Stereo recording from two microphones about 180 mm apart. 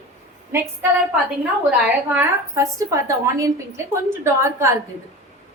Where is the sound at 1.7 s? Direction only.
10° right (ahead or behind).